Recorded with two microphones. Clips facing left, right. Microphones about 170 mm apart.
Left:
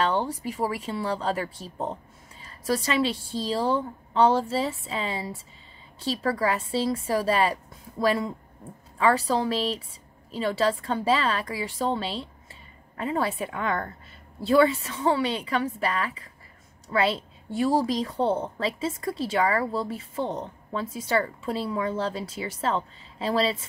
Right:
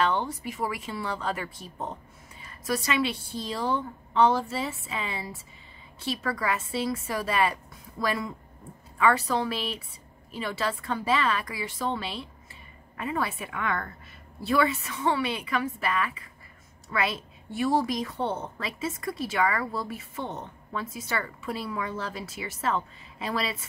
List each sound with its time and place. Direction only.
0.0 s a woman's voice: 35° left (ahead or behind)